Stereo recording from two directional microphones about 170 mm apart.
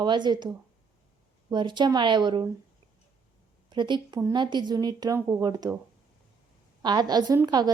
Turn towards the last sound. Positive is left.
turn(degrees=-25)  # may be behind; listen again after turning